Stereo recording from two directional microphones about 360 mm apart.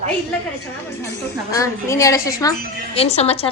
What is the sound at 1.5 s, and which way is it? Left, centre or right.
A woman's voice, centre.